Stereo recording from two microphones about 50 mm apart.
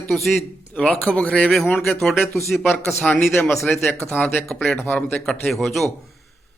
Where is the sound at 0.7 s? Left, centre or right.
Left.